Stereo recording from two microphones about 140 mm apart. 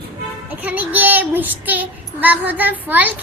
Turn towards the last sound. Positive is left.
turn(degrees=-10)  # may be behind; listen again after turning